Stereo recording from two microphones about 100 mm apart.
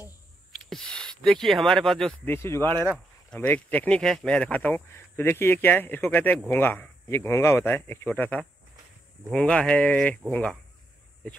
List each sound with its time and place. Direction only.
0.5 s a sound: 5° left (ahead or behind)
2.2 s speech: 25° left (ahead or behind)
3.3 s speech: 15° left (ahead or behind)